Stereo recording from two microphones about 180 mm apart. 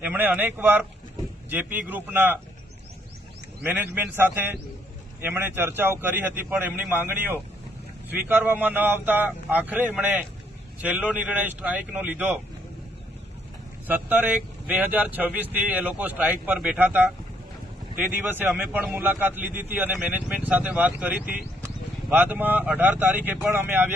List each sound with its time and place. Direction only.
0.0 s a man's voice: 10° right (ahead or behind)
3.6 s a man's voice: 10° right (ahead or behind)
13.8 s a man's voice: 10° right (ahead or behind)
18.1 s a man's voice: 10° right (ahead or behind)